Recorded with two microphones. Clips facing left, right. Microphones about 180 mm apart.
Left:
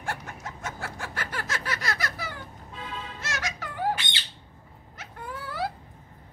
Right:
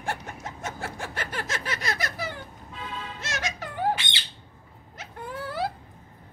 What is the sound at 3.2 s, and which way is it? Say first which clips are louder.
Music: right 2 dB; 20° right (ahead or behind).